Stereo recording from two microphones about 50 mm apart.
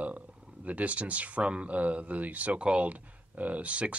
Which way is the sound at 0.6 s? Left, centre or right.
Right.